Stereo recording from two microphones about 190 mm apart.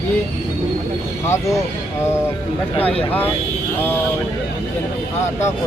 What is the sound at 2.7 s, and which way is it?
Speech, 30° left (ahead or behind).